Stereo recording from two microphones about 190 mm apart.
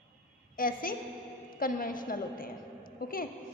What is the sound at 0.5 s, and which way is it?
A woman's voice, 50° left (ahead or behind).